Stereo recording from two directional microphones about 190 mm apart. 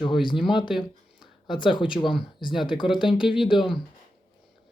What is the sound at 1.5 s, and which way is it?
Speech, 25° left (ahead or behind).